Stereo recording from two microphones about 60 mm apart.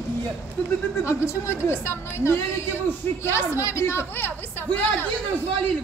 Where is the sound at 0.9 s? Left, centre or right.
Left.